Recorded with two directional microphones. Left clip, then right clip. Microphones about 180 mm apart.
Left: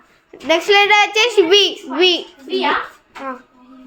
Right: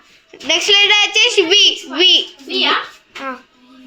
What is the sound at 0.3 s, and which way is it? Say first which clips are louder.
A child's voice: right 1 dB; 15° left (ahead or behind).